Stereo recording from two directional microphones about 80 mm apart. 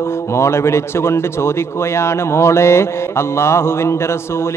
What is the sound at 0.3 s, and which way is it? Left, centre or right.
Speech, left.